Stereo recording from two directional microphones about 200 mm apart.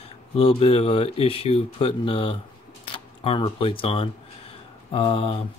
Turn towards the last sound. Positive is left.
turn(degrees=25)  # may be behind; listen again after turning